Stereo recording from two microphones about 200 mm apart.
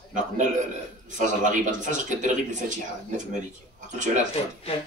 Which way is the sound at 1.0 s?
40° right (ahead or behind).